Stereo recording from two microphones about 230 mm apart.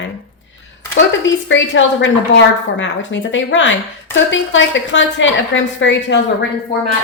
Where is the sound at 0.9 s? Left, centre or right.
Left.